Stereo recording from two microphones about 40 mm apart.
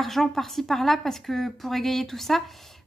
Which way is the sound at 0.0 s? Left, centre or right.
Centre.